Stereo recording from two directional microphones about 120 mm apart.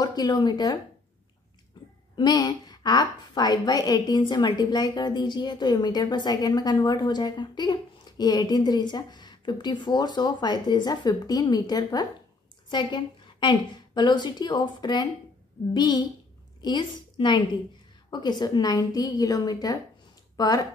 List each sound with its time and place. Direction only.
0.0 s speech: 35° left (ahead or behind)
1.8 s a sound: 40° left (ahead or behind)
2.1 s a woman's voice: 35° left (ahead or behind)